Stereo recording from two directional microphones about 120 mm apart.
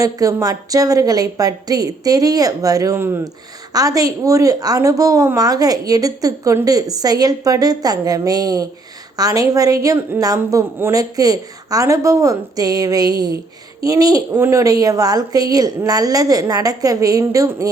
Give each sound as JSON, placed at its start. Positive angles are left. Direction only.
{"t": 0.0, "sound": "a woman's voice", "side_deg": -30}
{"t": 14.3, "sound": "speech", "side_deg": -20}
{"t": 14.6, "sound": "a woman's voice", "side_deg": -30}